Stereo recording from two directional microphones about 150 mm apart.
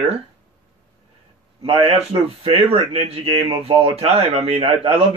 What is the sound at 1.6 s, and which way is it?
A man's voice, 40° right (ahead or behind).